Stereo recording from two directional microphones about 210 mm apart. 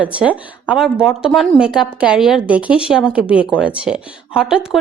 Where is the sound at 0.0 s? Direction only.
5° right (ahead or behind).